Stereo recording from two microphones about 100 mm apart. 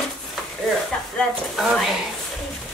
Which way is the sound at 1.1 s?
Centre (ahead or behind).